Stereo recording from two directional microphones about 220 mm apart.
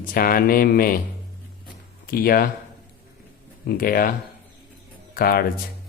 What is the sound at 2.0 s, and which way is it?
Speech, 40° left (ahead or behind).